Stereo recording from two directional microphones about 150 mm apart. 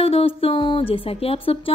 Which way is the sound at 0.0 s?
40° left (ahead or behind).